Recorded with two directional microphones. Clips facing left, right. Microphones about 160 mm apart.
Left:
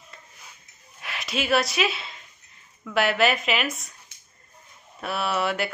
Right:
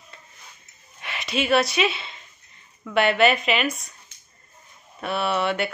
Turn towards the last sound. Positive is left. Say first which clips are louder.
# right 2 dB
turn(degrees=0)  # may be behind; listen again after turning